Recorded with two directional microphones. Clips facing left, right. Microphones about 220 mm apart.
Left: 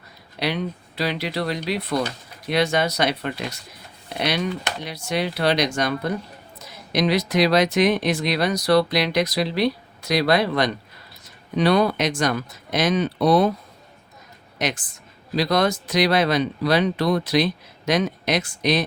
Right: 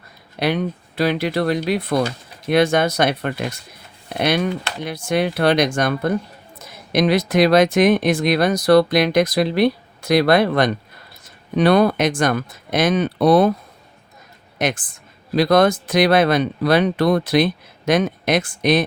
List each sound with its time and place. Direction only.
0.3 s speech: 50° right (ahead or behind)
14.6 s speech: 50° right (ahead or behind)